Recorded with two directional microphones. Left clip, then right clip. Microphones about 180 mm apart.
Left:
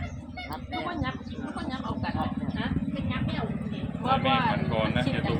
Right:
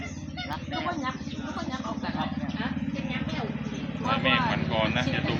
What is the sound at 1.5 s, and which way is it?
Speech, 55° left (ahead or behind).